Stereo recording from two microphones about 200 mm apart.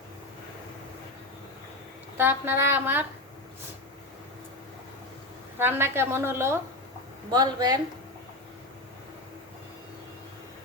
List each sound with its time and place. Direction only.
2.1 s a woman's voice: 10° right (ahead or behind)
5.5 s a woman's voice: 10° right (ahead or behind)